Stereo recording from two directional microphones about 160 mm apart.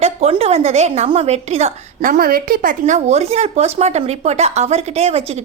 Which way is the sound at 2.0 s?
65° right (ahead or behind).